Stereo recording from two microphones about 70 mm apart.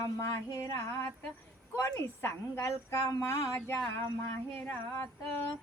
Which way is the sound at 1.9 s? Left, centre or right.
Left.